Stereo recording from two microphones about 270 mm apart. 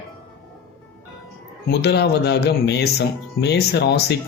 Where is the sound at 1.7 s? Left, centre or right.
Left.